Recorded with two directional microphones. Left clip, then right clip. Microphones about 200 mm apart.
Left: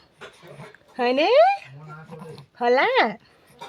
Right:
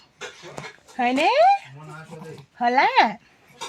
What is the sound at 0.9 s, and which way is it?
Speech, 35° left (ahead or behind).